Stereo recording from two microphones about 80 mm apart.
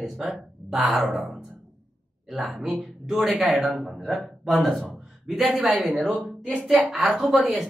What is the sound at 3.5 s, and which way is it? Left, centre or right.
Speech, centre.